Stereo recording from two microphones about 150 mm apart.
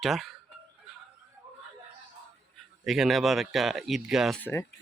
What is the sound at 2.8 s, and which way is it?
Speech, centre (ahead or behind).